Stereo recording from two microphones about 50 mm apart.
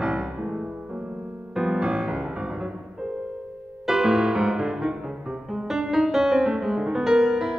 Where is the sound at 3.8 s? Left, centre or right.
Centre.